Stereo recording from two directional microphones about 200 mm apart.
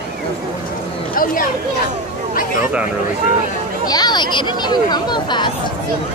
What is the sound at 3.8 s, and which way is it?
Speech, 20° left (ahead or behind).